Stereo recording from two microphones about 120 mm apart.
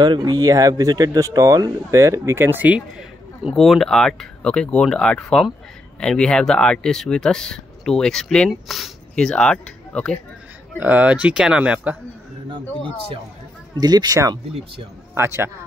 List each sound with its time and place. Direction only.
0.0 s speech: 35° right (ahead or behind); by 2.8 s 15° right (ahead or behind)
3.0 s speech: centre (ahead or behind)
10.8 s speech: 15° right (ahead or behind)
13.7 s speech: 35° right (ahead or behind)